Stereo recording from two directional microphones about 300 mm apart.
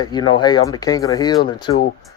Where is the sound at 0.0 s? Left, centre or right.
Centre.